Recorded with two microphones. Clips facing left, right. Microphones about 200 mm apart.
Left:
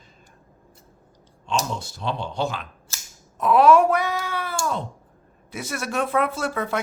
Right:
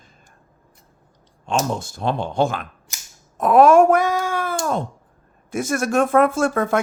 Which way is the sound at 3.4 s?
50° right (ahead or behind).